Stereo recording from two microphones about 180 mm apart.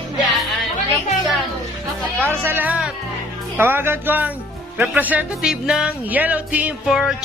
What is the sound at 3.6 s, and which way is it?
Speech, 10° right (ahead or behind).